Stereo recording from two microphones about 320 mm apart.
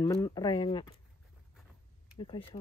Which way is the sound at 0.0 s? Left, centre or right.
Centre.